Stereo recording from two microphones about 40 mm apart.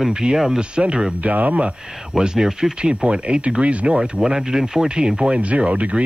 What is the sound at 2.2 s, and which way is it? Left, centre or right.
Speech, centre.